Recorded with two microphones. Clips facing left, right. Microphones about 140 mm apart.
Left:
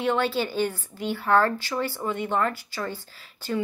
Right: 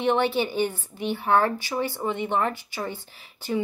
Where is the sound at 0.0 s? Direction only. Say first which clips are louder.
Right 2 dB; 20° right (ahead or behind).